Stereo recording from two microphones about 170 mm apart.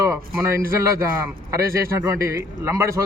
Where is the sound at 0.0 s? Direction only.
20° right (ahead or behind).